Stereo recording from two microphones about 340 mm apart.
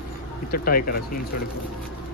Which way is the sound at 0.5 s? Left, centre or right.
Left.